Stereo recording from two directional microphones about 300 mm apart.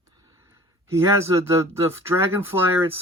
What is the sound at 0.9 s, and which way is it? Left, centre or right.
Speech, centre.